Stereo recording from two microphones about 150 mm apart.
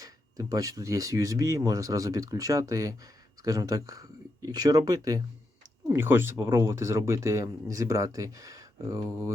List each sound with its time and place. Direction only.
0.0 s speech: 25° right (ahead or behind)